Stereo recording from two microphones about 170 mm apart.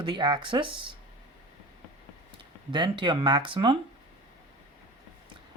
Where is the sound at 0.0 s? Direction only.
25° right (ahead or behind).